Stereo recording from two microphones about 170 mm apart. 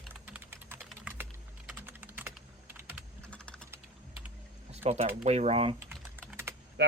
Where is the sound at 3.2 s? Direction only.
5° left (ahead or behind).